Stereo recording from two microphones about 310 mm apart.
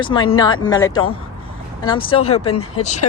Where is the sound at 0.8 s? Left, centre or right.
Left.